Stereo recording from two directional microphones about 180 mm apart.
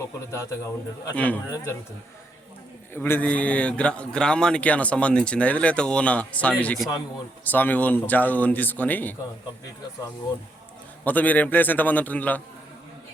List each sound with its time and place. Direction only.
0.0 s a man's voice: 15° left (ahead or behind)
2.9 s a man's voice: 10° left (ahead or behind)
11.0 s a man's voice: 10° left (ahead or behind)